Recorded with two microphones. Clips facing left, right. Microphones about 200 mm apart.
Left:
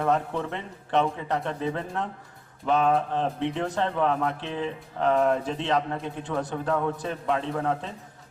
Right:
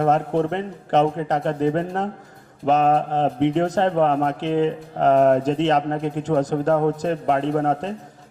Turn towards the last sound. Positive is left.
turn(degrees=-45)  # may be behind; listen again after turning